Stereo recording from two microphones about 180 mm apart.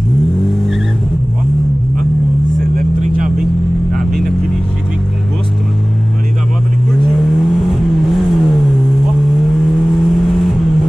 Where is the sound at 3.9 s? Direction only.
Centre (ahead or behind).